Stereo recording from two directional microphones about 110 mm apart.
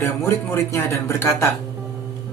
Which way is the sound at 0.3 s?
25° left (ahead or behind).